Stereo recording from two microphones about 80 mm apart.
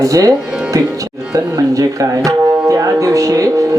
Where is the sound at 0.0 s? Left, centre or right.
Right.